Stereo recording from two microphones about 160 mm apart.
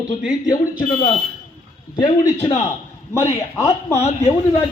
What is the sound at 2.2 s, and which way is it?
Speech, 40° left (ahead or behind).